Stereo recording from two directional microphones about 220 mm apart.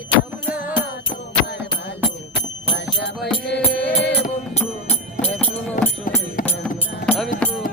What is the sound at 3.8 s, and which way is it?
Music, 50° left (ahead or behind).